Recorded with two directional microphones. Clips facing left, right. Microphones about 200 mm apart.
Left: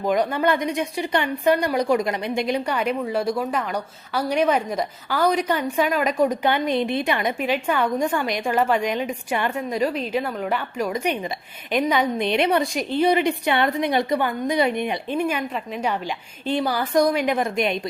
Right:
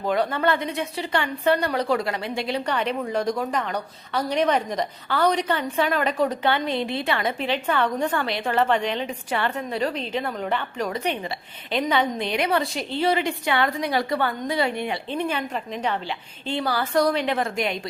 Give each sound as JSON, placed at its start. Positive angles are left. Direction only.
{"t": 0.0, "sound": "speech", "side_deg": 15}